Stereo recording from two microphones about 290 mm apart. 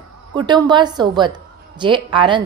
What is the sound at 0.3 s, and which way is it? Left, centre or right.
A woman's voice, centre.